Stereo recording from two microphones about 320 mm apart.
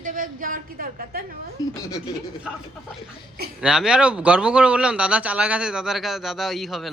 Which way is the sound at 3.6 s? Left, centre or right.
Centre.